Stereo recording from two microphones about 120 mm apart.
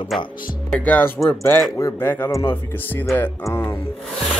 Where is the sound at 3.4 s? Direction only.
25° left (ahead or behind).